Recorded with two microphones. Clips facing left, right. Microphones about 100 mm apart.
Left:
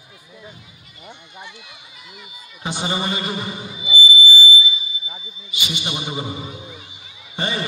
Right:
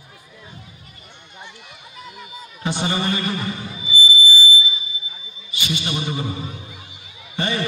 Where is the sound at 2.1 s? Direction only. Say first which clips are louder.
Right 5 dB; 15° left (ahead or behind).